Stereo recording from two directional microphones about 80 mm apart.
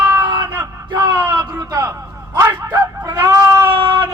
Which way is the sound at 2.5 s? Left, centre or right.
Right.